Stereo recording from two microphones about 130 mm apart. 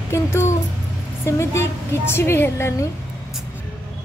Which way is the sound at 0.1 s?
20° left (ahead or behind).